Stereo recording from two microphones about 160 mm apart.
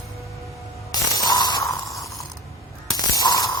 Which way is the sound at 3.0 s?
25° left (ahead or behind).